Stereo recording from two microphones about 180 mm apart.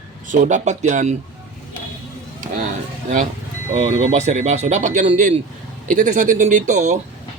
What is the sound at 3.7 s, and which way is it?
A man's voice, 35° right (ahead or behind).